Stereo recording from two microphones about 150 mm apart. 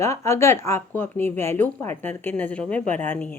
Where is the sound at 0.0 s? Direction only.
20° left (ahead or behind).